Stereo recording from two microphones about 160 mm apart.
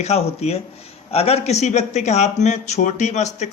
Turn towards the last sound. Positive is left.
turn(degrees=45)  # may be behind; listen again after turning